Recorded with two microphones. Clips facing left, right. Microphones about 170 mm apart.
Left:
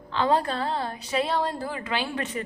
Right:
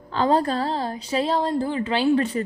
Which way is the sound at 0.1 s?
40° right (ahead or behind).